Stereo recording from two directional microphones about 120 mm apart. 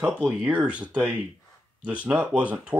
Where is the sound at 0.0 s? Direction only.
10° right (ahead or behind).